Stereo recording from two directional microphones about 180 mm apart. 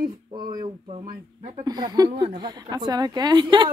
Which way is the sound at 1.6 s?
20° right (ahead or behind).